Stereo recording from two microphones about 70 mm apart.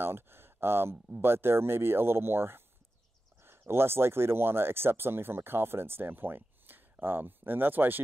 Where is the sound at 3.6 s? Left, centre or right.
Right.